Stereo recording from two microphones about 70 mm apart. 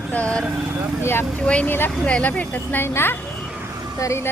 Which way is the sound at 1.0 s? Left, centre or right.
Left.